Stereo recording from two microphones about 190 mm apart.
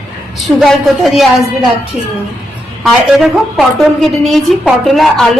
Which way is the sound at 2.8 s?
Centre (ahead or behind).